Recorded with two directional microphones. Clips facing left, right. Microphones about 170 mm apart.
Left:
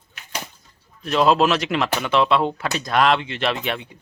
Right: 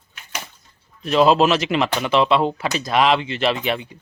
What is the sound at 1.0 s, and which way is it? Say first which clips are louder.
Speech: right 2 dB; centre (ahead or behind).